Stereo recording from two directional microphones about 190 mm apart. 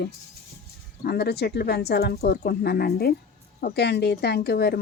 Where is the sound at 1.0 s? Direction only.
55° left (ahead or behind).